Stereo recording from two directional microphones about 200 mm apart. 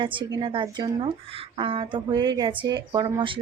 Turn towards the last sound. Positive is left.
turn(degrees=-25)  # may be behind; listen again after turning